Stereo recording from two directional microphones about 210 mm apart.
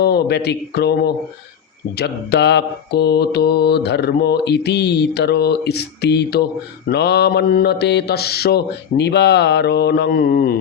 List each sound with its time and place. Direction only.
0.0 s mantra: 50° left (ahead or behind)